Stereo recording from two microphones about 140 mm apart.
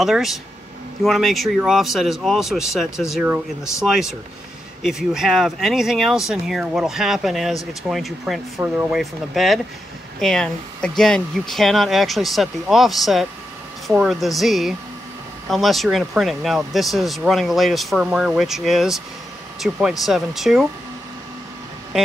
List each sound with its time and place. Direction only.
0.0 s speech: centre (ahead or behind)
8.6 s speech: 15° right (ahead or behind)
8.9 s speech: centre (ahead or behind)